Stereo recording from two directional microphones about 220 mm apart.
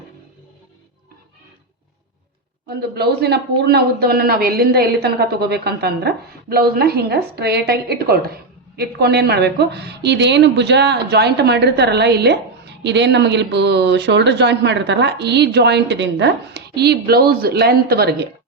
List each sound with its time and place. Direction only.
2.6 s a woman's voice: 45° right (ahead or behind)